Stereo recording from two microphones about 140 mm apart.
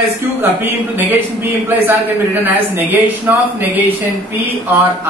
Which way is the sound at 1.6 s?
15° right (ahead or behind).